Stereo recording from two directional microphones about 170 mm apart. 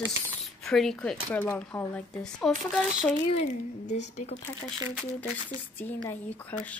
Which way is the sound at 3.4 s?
45° left (ahead or behind).